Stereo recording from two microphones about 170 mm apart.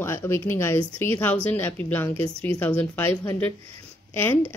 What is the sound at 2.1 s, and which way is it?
Speech, 35° right (ahead or behind).